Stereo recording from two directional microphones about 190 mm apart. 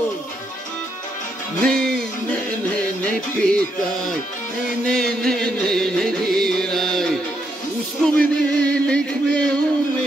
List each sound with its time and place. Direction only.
1.6 s music: 5° left (ahead or behind)
4.8 s music: 5° left (ahead or behind)